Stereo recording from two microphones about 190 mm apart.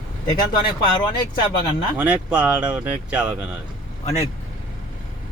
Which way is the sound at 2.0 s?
10° right (ahead or behind).